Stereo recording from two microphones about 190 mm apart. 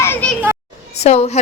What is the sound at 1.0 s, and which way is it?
Speech, 35° left (ahead or behind).